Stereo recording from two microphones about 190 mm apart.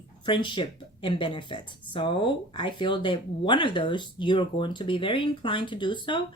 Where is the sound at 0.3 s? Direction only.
25° left (ahead or behind).